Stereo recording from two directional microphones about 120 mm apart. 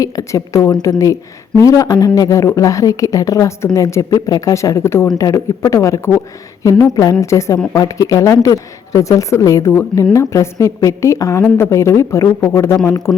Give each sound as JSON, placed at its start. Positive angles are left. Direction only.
{"t": 0.0, "sound": "speech", "side_deg": 30}